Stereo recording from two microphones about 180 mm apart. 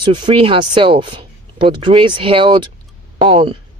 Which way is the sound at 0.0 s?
25° right (ahead or behind).